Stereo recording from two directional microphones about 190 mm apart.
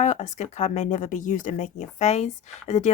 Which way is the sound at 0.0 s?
40° left (ahead or behind).